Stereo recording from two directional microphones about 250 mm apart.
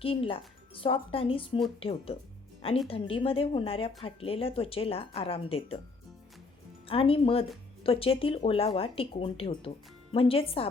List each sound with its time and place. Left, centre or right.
0.0 s speech: left
6.8 s speech: left